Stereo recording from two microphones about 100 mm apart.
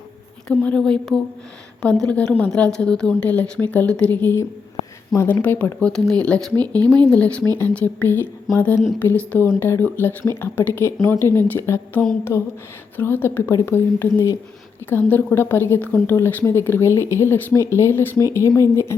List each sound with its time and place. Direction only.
0.4 s speech: 10° left (ahead or behind); by 5.4 s 25° left (ahead or behind)
5.4 s speech: 15° left (ahead or behind)